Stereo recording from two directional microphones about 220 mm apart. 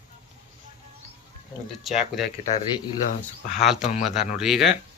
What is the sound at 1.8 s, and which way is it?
Speech, centre (ahead or behind).